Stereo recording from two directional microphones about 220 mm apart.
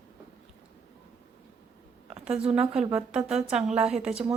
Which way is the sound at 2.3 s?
25° right (ahead or behind).